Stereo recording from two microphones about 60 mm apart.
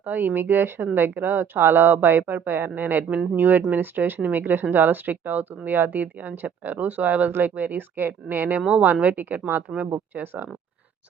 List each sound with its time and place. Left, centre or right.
0.0 s speech: right